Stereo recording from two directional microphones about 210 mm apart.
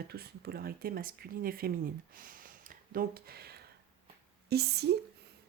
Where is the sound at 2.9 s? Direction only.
45° right (ahead or behind).